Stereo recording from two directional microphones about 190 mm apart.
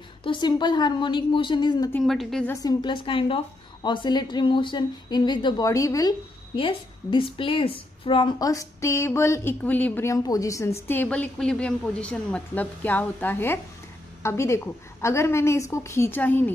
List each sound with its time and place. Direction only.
0.2 s a woman's voice: 25° left (ahead or behind)
1.9 s a woman's voice: 5° left (ahead or behind)
2.5 s a woman's voice: 20° left (ahead or behind)